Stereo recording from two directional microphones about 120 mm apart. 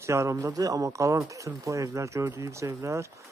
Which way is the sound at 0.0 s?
25° right (ahead or behind).